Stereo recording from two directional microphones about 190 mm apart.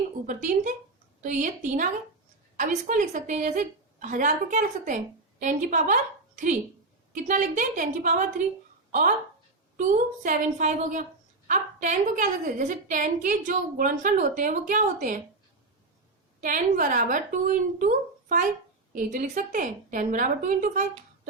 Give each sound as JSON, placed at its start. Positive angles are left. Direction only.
{"t": 0.3, "sound": "a woman's voice", "side_deg": -45}
{"t": 16.4, "sound": "a woman's voice", "side_deg": -45}